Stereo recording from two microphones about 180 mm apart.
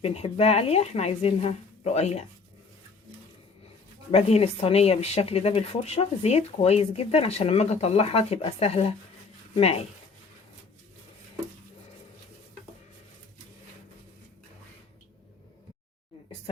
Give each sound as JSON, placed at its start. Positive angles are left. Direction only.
{"t": 0.0, "sound": "speech", "side_deg": 35}
{"t": 4.1, "sound": "speech", "side_deg": 35}